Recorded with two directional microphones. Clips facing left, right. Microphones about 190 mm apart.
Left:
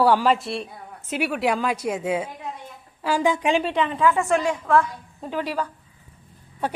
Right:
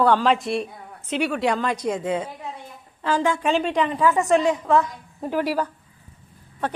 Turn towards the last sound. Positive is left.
turn(degrees=10)  # may be behind; listen again after turning